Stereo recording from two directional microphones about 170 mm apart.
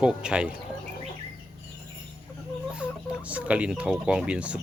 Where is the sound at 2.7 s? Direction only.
5° right (ahead or behind).